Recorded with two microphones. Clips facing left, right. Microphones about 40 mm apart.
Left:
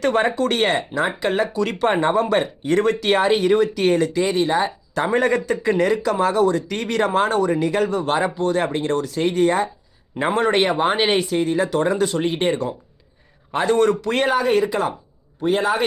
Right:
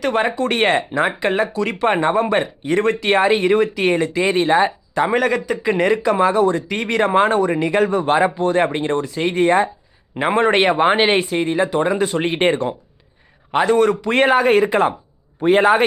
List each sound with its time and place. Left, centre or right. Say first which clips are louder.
0.1 s speech: even; centre
0.5 s speech: right 3 dB; right
1.5 s speech: right 1 dB; centre; by 4.7 s right
5.3 s speech: even; centre
5.7 s speech: right 4 dB; right
14.1 s speech: right 4 dB; right